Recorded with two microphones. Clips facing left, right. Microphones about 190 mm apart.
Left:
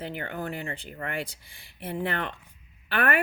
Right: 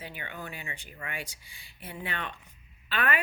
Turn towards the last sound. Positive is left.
turn(degrees=50)  # may be behind; listen again after turning